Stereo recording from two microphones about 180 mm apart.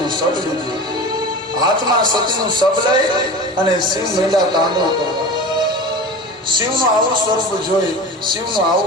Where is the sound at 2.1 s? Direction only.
25° right (ahead or behind).